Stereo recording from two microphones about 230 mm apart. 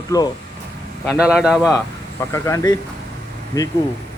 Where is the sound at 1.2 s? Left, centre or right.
Centre.